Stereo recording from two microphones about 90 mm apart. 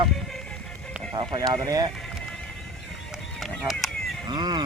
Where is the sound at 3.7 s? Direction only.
5° left (ahead or behind).